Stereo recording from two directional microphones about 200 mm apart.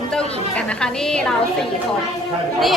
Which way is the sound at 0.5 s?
5° left (ahead or behind).